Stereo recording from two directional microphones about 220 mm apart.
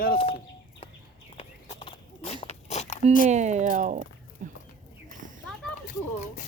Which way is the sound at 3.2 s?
30° right (ahead or behind).